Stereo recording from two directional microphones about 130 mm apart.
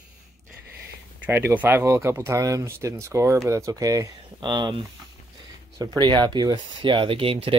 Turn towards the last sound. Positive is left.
turn(degrees=-45)  # may be behind; listen again after turning